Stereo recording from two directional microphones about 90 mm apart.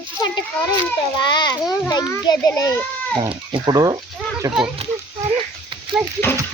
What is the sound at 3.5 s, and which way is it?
Speech, 45° right (ahead or behind).